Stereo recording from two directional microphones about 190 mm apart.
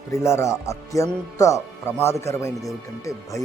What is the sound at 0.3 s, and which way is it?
Speech, 15° left (ahead or behind).